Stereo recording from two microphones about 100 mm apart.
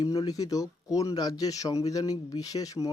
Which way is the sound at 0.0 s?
40° left (ahead or behind).